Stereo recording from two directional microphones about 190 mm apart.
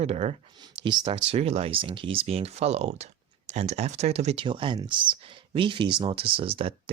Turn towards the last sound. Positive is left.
turn(degrees=-30)  # may be behind; listen again after turning